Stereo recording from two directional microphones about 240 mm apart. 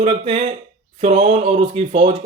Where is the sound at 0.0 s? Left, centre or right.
Right.